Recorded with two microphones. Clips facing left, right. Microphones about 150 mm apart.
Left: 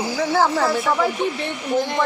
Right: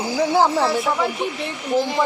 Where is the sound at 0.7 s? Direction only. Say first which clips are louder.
Left 1 dB; centre (ahead or behind).